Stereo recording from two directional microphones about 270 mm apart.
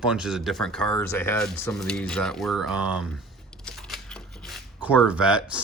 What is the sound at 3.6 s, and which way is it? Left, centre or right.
Shuffling cards, centre.